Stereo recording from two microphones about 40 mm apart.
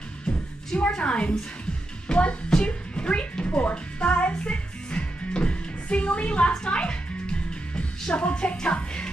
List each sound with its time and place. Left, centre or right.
0.7 s a woman's voice: left
2.0 s music: left